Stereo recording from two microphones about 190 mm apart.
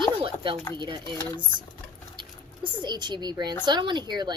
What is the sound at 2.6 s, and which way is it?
Speech, 25° right (ahead or behind).